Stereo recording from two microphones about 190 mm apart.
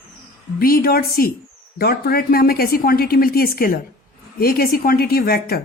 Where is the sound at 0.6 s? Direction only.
50° left (ahead or behind).